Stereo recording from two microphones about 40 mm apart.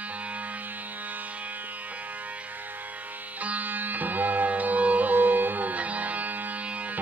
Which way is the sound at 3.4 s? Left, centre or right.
Right.